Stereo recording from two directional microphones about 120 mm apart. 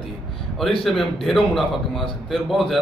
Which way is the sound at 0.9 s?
Centre (ahead or behind).